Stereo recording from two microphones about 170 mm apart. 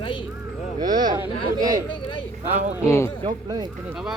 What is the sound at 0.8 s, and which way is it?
Speech, 55° right (ahead or behind).